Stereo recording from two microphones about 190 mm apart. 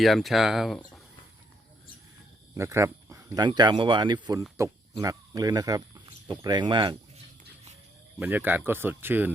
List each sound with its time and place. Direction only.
0.0 s speech: centre (ahead or behind)
2.6 s speech: 15° right (ahead or behind)
8.2 s speech: 10° right (ahead or behind)